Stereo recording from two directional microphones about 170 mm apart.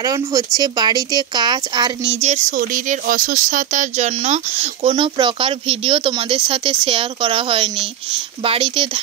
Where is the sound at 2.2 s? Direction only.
45° right (ahead or behind).